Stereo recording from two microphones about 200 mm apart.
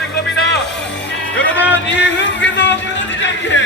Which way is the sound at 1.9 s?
60° left (ahead or behind).